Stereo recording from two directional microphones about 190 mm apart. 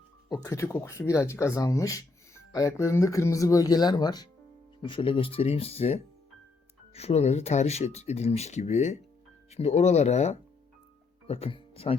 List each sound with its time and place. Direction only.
0.3 s speech: 15° left (ahead or behind)